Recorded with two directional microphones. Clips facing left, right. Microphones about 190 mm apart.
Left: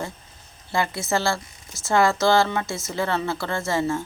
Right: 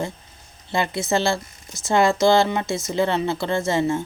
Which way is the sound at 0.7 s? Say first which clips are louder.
Right 2 dB; 20° right (ahead or behind).